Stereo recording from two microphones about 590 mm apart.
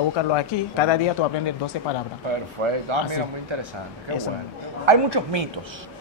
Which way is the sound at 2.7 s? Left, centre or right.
Right.